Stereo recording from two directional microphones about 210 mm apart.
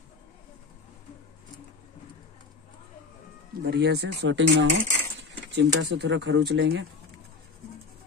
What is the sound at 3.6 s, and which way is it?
Speech, 55° right (ahead or behind).